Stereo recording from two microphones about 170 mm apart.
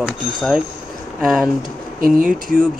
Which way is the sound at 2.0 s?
55° right (ahead or behind).